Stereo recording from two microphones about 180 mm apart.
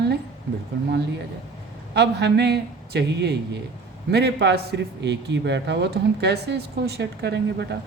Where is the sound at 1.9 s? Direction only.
70° right (ahead or behind).